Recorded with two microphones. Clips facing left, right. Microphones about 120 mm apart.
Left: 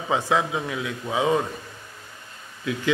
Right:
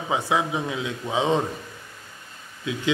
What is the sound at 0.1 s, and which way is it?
Speech, 15° right (ahead or behind).